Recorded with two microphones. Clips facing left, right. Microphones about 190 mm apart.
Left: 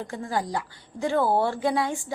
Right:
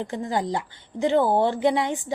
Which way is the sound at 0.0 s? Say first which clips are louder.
Right 3 dB; 20° right (ahead or behind).